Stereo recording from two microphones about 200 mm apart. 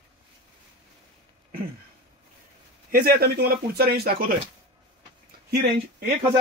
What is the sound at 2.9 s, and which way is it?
Speech, 50° right (ahead or behind).